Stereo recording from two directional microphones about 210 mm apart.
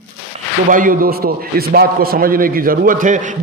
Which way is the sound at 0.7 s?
40° right (ahead or behind).